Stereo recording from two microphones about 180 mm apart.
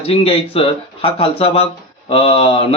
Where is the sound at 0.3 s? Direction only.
30° left (ahead or behind).